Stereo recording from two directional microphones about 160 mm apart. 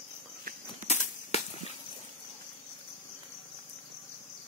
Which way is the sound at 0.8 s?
40° left (ahead or behind).